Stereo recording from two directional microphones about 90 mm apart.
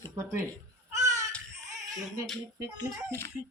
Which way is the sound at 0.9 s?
35° right (ahead or behind).